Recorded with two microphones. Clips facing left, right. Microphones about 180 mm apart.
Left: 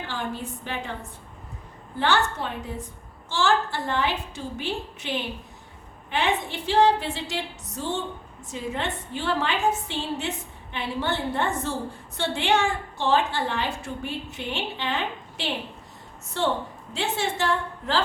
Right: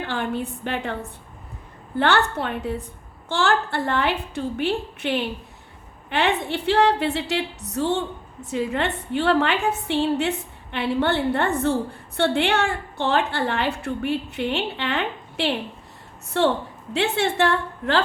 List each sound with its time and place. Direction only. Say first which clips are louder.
0.1 s a woman's voice: right 5 dB; 60° right (ahead or behind)
2.0 s a woman's voice: right 3 dB; 60° right (ahead or behind)